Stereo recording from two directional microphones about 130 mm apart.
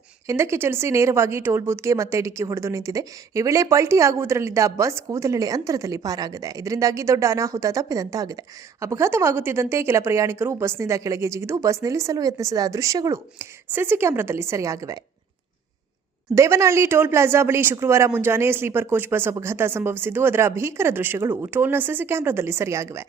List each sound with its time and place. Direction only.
0.3 s a woman's voice: 20° right (ahead or behind)
16.3 s a woman's voice: 25° right (ahead or behind)